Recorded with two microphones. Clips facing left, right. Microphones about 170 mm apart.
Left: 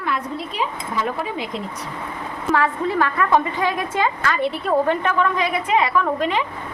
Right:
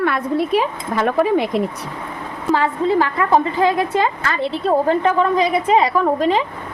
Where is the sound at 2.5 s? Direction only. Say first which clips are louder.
Right 3 dB; 25° right (ahead or behind).